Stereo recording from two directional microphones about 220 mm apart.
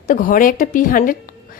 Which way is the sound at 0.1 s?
40° left (ahead or behind).